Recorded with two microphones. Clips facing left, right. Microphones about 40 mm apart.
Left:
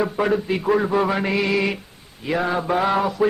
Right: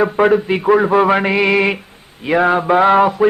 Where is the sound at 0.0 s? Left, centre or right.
Right.